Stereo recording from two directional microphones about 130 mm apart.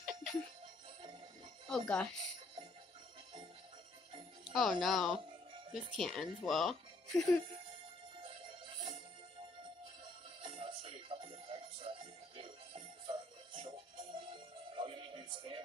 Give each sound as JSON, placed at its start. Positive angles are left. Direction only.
{"t": 0.0, "sound": "music", "side_deg": 0}
{"t": 1.7, "sound": "speech", "side_deg": 10}
{"t": 4.5, "sound": "speech", "side_deg": 0}
{"t": 8.2, "sound": "music", "side_deg": -40}
{"t": 10.4, "sound": "music", "side_deg": -40}